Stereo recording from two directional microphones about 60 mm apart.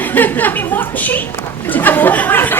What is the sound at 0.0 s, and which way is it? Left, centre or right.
Speech, left.